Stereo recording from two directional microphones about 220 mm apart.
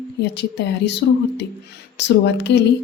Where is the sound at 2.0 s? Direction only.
50° left (ahead or behind).